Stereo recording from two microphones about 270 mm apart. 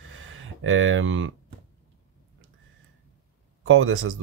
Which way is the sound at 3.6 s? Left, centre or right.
Right.